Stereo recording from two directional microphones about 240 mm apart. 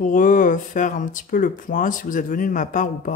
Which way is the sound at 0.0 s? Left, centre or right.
Left.